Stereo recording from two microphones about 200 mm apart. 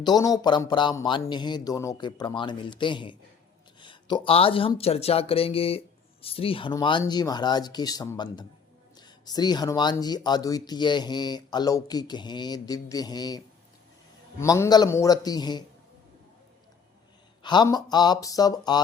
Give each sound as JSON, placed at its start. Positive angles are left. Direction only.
{"t": 0.0, "sound": "speech", "side_deg": 20}
{"t": 14.4, "sound": "speech", "side_deg": 15}
{"t": 17.4, "sound": "speech", "side_deg": 20}